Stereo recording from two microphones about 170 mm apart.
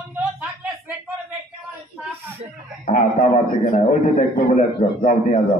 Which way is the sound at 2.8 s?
50° left (ahead or behind).